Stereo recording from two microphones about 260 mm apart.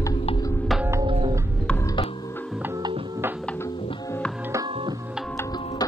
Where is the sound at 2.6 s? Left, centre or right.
Centre.